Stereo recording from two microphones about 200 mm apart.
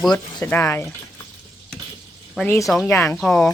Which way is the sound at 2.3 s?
10° left (ahead or behind).